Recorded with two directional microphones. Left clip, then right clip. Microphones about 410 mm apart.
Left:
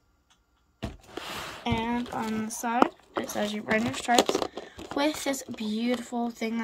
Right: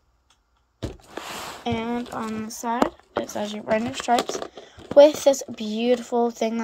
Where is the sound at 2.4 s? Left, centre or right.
Centre.